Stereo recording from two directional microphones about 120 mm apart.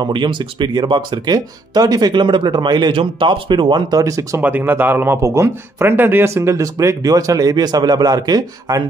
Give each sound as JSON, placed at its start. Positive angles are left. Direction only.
{"t": 0.0, "sound": "speech", "side_deg": -40}
{"t": 4.0, "sound": "a man's voice", "side_deg": -25}
{"t": 4.4, "sound": "a man's voice", "side_deg": -15}